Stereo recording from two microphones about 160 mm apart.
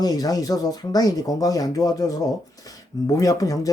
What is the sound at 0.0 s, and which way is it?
Speech, 25° left (ahead or behind).